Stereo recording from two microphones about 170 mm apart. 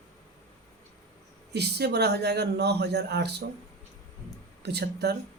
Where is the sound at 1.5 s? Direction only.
75° right (ahead or behind).